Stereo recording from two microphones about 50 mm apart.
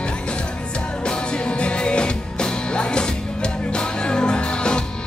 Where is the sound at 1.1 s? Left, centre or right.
Centre.